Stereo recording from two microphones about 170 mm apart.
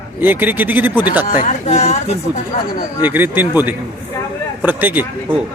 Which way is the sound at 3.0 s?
10° right (ahead or behind).